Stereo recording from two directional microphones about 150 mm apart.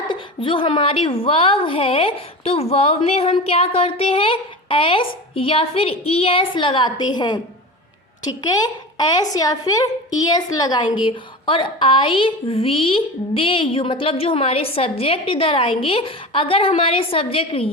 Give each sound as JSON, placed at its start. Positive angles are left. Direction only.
{"t": 0.1, "sound": "a woman's voice", "side_deg": 35}